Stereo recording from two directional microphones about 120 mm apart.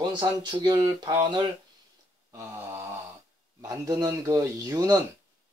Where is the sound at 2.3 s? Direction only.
20° right (ahead or behind).